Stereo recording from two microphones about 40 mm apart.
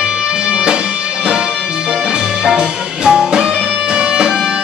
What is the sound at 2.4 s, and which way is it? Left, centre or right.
Music, right.